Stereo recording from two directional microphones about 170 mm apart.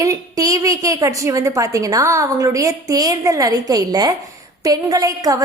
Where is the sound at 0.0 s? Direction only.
20° right (ahead or behind).